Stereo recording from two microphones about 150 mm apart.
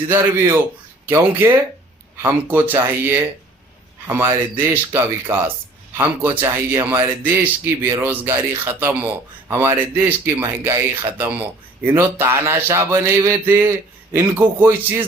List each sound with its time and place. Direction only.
0.1 s speech: 15° right (ahead or behind)